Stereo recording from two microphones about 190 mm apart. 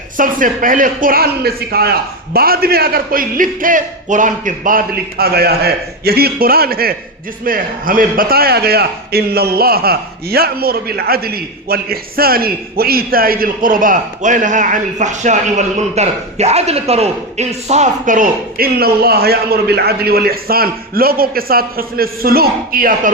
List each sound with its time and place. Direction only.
0.2 s a man's voice: 45° right (ahead or behind)